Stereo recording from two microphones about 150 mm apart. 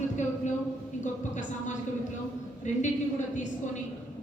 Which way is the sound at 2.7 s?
55° left (ahead or behind).